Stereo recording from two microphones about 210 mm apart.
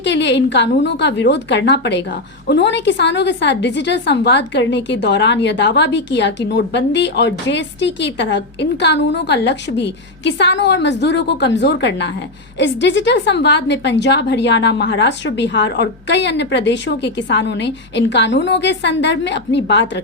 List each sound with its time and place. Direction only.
0.0 s a woman's voice: 55° left (ahead or behind)